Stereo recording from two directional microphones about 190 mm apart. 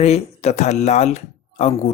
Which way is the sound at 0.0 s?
35° left (ahead or behind).